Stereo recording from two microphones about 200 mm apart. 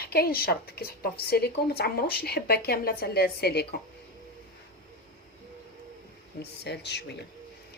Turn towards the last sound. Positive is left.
turn(degrees=55)  # may be behind; listen again after turning